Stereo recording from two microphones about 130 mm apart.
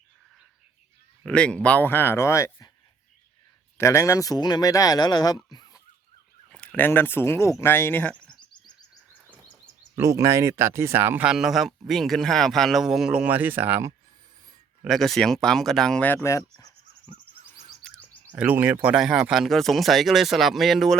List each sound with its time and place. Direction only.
1.2 s speech: 10° left (ahead or behind)
3.8 s speech: 20° left (ahead or behind)
5.5 s a sound: 30° left (ahead or behind)
6.5 s speech: 10° left (ahead or behind)
9.9 s speech: 25° right (ahead or behind)
11.3 s speech: centre (ahead or behind)
14.8 s speech: centre (ahead or behind)
16.0 s speech: 20° left (ahead or behind)
17.8 s a sound: 5° left (ahead or behind)
18.3 s speech: 10° right (ahead or behind)